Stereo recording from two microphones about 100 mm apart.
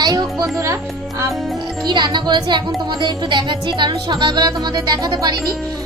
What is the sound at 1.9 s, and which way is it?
Speech, 50° right (ahead or behind).